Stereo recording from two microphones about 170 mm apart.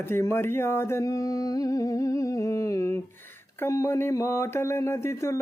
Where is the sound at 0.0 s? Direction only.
15° left (ahead or behind).